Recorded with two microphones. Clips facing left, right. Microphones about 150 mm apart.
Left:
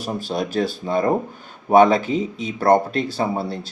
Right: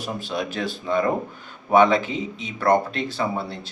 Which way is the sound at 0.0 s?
35° left (ahead or behind).